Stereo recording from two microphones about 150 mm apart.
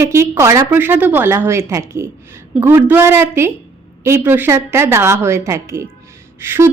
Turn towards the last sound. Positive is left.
turn(degrees=-15)  # may be behind; listen again after turning